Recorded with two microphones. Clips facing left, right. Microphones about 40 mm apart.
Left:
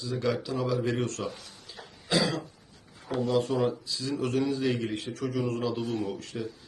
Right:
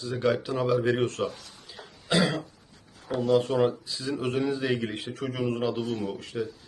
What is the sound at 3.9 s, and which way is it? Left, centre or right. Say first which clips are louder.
Speech: right 1 dB; centre.